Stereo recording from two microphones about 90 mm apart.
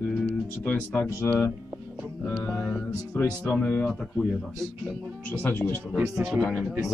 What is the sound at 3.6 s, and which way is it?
Speech, 15° left (ahead or behind).